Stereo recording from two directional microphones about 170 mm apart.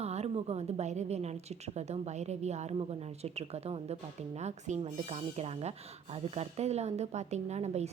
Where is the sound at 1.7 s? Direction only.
40° right (ahead or behind).